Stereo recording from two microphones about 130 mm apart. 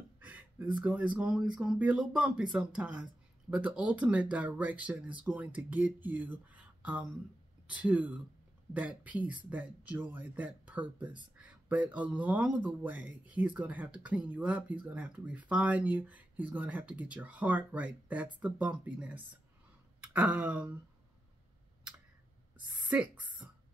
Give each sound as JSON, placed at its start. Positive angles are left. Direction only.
{"t": 0.2, "sound": "speech", "side_deg": -10}
{"t": 20.0, "sound": "a sound", "side_deg": -10}
{"t": 22.8, "sound": "speech", "side_deg": -10}